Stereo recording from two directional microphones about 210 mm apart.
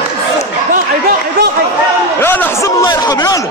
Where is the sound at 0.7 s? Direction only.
40° right (ahead or behind).